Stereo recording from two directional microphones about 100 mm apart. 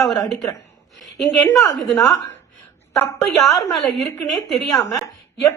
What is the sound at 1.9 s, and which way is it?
Speech, centre (ahead or behind).